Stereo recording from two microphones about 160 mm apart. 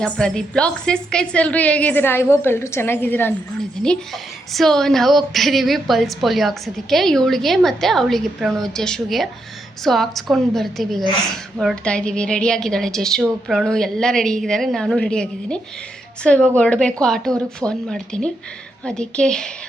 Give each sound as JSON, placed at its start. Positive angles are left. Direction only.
{"t": 0.0, "sound": "a woman's voice", "side_deg": 5}
{"t": 4.5, "sound": "a woman's voice", "side_deg": 0}